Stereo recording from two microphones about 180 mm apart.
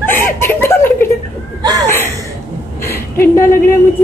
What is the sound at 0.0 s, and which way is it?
Chuckle, 10° left (ahead or behind).